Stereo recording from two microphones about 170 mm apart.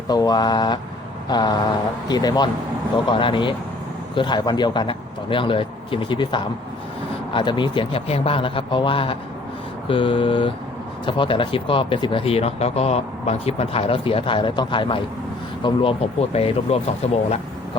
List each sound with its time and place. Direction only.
0.1 s a man's voice: 25° left (ahead or behind)